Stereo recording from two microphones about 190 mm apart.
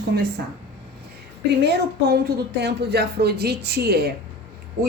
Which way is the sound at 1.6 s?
60° right (ahead or behind).